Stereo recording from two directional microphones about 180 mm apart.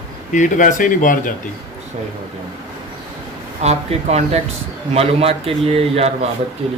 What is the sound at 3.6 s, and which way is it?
A man's voice, 40° right (ahead or behind).